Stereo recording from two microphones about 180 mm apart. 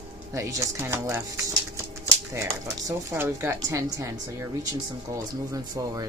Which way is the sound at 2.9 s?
15° right (ahead or behind).